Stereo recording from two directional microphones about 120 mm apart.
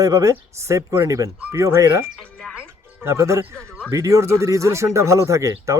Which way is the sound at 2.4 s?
Centre (ahead or behind).